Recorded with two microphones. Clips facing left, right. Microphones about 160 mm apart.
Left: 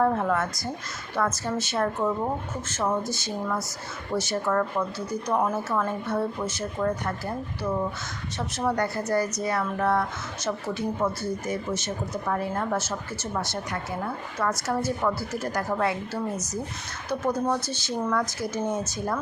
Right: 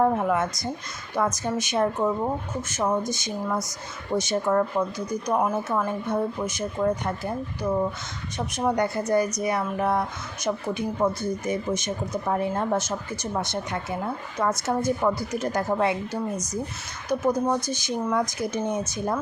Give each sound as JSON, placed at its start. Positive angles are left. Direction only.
{"t": 0.0, "sound": "speech", "side_deg": -10}